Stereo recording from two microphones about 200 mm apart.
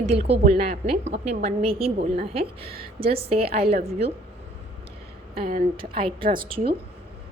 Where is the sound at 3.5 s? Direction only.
50° right (ahead or behind).